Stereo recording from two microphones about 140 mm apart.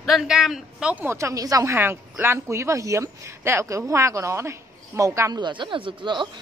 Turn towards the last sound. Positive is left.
turn(degrees=-35)  # may be behind; listen again after turning